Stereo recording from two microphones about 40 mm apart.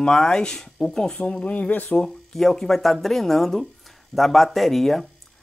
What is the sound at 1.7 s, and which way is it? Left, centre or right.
Speech, left.